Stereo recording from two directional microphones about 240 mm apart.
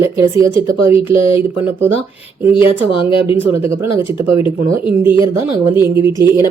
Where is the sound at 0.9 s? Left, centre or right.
Left.